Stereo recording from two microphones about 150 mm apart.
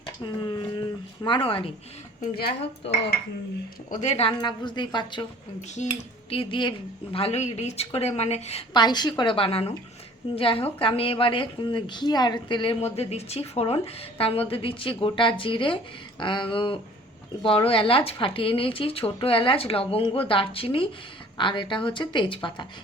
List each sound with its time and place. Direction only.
0.0 s speech: 25° left (ahead or behind)
2.2 s a woman's voice: 90° left
3.8 s speech: 50° left (ahead or behind)
4.3 s speech: 30° left (ahead or behind)
5.8 s speech: 50° left (ahead or behind)
6.3 s speech: 35° left (ahead or behind)
8.7 s speech: 30° left (ahead or behind)
12.8 s speech: 45° left (ahead or behind)